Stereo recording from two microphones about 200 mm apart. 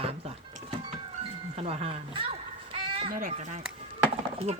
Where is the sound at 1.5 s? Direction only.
30° right (ahead or behind).